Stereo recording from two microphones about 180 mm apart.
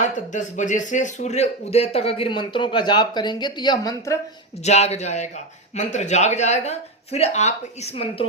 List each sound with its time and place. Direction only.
0.0 s speech: 45° left (ahead or behind); by 4.2 s 20° left (ahead or behind)
4.6 s speech: 35° left (ahead or behind)